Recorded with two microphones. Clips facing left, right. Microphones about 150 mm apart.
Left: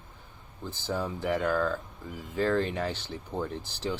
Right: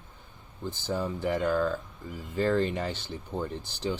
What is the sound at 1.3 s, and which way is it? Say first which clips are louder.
Speech: right 1 dB; 10° right (ahead or behind).